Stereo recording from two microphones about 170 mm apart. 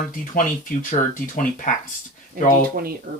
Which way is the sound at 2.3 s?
60° right (ahead or behind).